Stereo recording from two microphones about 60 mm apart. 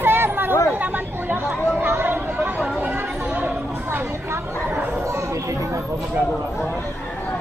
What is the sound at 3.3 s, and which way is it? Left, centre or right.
Chatter, right.